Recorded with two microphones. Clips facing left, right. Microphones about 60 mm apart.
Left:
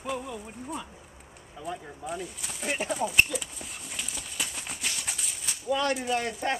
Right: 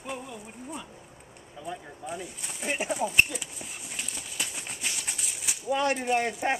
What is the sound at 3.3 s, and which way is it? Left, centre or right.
Horse, centre.